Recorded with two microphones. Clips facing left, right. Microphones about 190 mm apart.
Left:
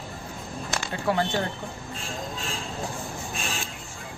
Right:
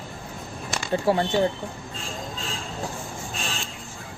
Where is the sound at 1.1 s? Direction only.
30° right (ahead or behind).